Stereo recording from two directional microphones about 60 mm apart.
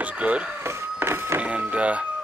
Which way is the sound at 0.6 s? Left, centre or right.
Right.